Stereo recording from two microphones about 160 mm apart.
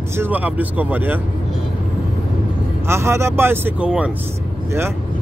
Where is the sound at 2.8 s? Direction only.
15° right (ahead or behind).